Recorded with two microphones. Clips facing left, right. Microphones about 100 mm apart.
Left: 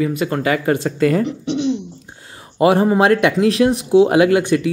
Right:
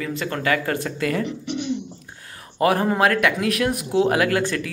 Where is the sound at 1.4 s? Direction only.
90° left.